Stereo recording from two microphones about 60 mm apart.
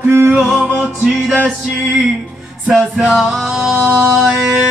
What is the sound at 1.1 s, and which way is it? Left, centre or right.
Male singing, centre.